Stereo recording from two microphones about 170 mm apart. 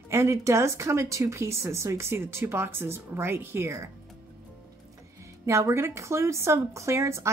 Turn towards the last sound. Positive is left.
turn(degrees=-15)  # may be behind; listen again after turning